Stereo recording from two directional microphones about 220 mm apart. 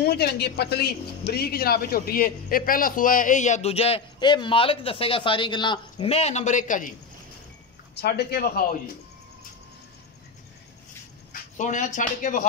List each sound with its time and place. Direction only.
0.0 s a woman's voice: 45° left (ahead or behind)
7.9 s a woman's voice: 45° left (ahead or behind)
11.3 s speech: 35° left (ahead or behind)